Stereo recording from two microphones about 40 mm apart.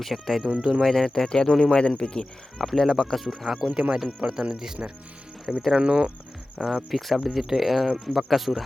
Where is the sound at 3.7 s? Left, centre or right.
Right.